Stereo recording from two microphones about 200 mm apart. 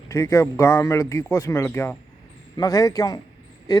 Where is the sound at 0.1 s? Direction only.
15° left (ahead or behind).